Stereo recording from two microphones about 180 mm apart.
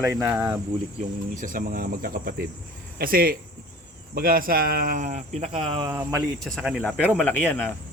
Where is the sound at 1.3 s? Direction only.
50° right (ahead or behind); by 5.9 s 30° right (ahead or behind).